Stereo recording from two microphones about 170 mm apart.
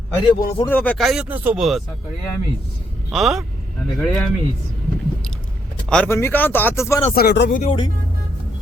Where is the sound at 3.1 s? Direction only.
Centre (ahead or behind).